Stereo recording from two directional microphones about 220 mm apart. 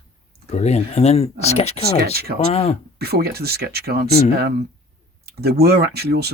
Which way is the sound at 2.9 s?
45° right (ahead or behind).